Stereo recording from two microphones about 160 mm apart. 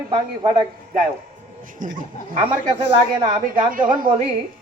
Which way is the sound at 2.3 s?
35° right (ahead or behind).